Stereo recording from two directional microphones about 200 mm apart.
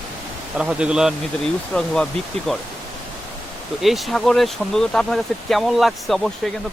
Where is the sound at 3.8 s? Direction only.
Centre (ahead or behind).